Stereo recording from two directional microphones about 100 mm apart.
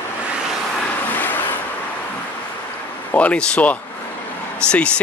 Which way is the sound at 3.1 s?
15° left (ahead or behind).